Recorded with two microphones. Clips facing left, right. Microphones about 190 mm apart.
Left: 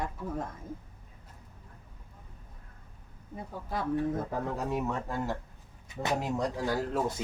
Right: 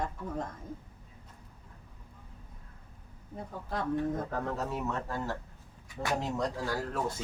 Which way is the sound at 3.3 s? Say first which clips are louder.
Left 1 dB; 5° left (ahead or behind).